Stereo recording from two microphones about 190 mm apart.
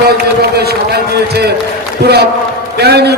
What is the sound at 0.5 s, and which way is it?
Run, 55° right (ahead or behind).